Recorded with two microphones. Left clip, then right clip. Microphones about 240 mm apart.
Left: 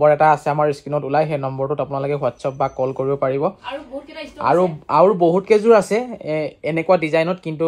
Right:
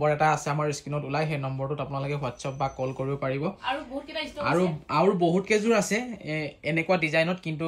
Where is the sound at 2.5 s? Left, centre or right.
Left.